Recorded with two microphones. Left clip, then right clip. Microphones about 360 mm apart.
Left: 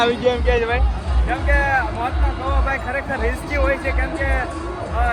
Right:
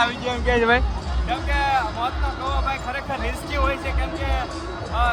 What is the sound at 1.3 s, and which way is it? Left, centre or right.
Speech, centre.